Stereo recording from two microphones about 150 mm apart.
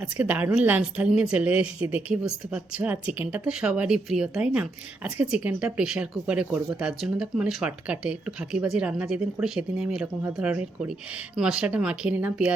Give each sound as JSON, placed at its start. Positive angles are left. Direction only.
{"t": 0.0, "sound": "speech", "side_deg": -10}